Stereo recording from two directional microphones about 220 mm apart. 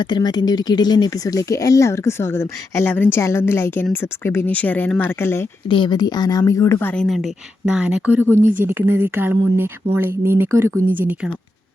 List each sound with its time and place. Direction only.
0.0 s speech: 20° left (ahead or behind)
5.6 s speech: 20° left (ahead or behind); by 8.4 s 10° right (ahead or behind)
8.4 s speech: 35° right (ahead or behind)
8.6 s speech: 10° right (ahead or behind)